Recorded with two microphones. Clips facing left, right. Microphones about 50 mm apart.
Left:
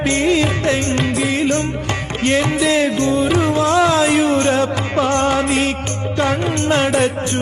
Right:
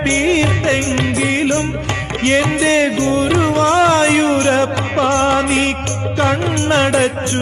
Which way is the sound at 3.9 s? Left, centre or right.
Right.